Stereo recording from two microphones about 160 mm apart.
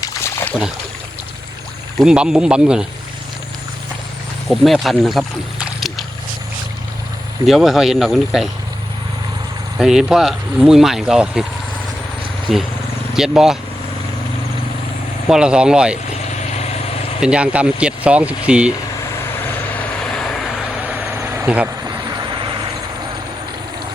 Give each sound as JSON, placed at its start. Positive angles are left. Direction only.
{"t": 0.0, "sound": "splash", "side_deg": 15}
{"t": 2.0, "sound": "speech", "side_deg": -5}
{"t": 4.4, "sound": "speech", "side_deg": 0}
{"t": 7.4, "sound": "speech", "side_deg": 0}
{"t": 9.7, "sound": "speech", "side_deg": -5}
{"t": 12.5, "sound": "speech", "side_deg": 0}
{"t": 15.3, "sound": "speech", "side_deg": -5}
{"t": 16.0, "sound": "vehicle", "side_deg": 45}
{"t": 17.2, "sound": "speech", "side_deg": -5}
{"t": 19.2, "sound": "vehicle", "side_deg": 10}
{"t": 21.4, "sound": "speech", "side_deg": -10}
{"t": 21.8, "sound": "vehicle", "side_deg": -25}